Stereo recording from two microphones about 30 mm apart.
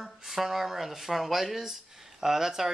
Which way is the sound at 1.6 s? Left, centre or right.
Centre.